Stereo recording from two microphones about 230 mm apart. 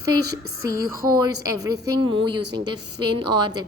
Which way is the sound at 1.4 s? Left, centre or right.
Centre.